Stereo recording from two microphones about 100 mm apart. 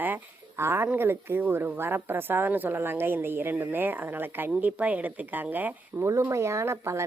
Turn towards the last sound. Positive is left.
turn(degrees=-25)  # may be behind; listen again after turning